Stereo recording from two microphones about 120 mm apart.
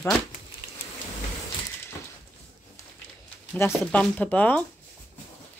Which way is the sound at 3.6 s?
20° left (ahead or behind).